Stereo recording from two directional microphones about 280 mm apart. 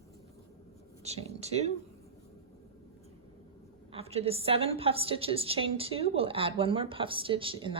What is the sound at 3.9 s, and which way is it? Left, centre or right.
A woman's voice, right.